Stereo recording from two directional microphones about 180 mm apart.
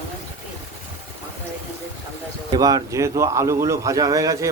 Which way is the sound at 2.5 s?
20° right (ahead or behind).